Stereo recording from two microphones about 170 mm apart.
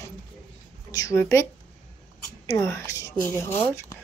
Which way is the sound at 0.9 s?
20° left (ahead or behind).